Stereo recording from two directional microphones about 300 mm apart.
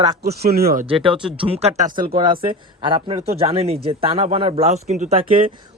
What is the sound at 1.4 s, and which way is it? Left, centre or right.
A man's voice, centre.